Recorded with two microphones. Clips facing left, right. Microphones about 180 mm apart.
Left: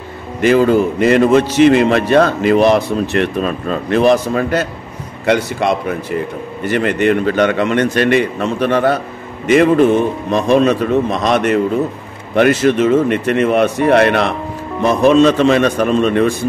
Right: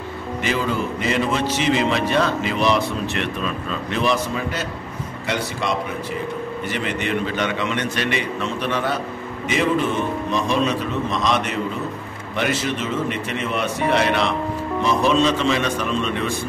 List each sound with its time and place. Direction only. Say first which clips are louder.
0.4 s a man's voice: left 12 dB; 55° left (ahead or behind)